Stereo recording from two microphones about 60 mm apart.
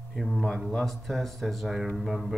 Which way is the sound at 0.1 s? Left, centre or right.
Centre.